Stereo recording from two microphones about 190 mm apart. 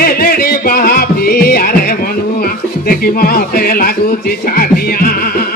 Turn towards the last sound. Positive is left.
turn(degrees=50)  # may be behind; listen again after turning